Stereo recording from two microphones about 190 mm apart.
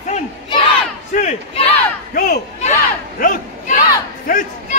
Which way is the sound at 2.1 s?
50° left (ahead or behind).